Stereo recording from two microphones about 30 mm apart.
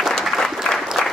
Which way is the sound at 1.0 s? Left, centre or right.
Left.